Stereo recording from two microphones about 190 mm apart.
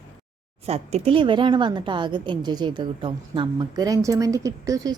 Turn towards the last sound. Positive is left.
turn(degrees=-15)  # may be behind; listen again after turning